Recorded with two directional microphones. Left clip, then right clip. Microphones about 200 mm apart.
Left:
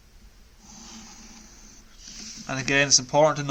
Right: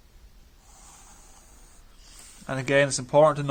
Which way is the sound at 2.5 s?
45° right (ahead or behind).